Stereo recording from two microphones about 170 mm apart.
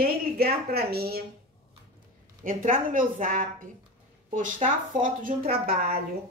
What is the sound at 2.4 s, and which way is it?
A woman's voice, 50° right (ahead or behind).